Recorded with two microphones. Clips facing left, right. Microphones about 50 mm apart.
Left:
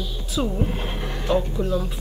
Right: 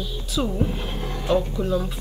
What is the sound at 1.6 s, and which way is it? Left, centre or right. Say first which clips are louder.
Speech: even; centre.